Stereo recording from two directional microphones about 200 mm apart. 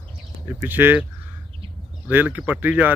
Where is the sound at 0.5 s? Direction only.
10° right (ahead or behind).